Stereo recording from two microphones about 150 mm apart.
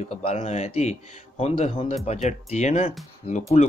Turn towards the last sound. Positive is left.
turn(degrees=50)  # may be behind; listen again after turning